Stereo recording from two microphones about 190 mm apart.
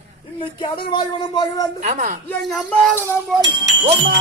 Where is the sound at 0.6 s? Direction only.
25° left (ahead or behind).